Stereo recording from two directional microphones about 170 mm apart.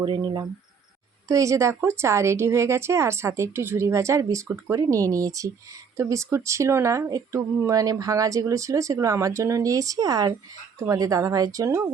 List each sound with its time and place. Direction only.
0.0 s speech: 25° right (ahead or behind)